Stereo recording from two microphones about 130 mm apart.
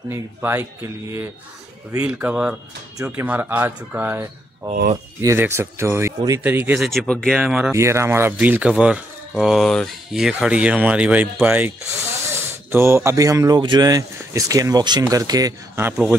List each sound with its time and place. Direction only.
0.1 s speech: 20° right (ahead or behind)
5.2 s speech: 20° right (ahead or behind)
6.8 s speech: centre (ahead or behind)
7.4 s speech: 5° right (ahead or behind)
7.7 s speech: 20° right (ahead or behind)